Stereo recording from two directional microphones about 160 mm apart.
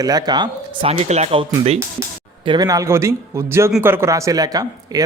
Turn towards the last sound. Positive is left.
turn(degrees=-20)  # may be behind; listen again after turning